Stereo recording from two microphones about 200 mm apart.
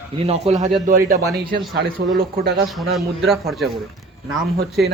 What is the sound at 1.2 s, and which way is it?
Speech, 20° right (ahead or behind).